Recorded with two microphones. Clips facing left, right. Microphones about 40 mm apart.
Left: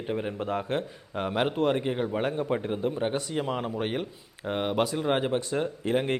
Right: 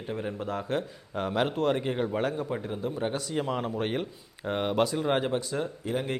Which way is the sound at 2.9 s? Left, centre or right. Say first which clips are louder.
Left 1 dB; centre.